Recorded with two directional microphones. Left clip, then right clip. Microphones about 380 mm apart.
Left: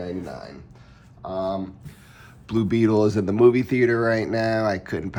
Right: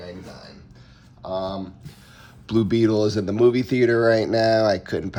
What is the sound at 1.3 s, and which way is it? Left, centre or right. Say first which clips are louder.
Speech: left 1 dB; centre.